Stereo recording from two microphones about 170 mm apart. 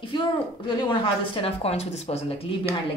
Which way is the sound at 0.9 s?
30° left (ahead or behind).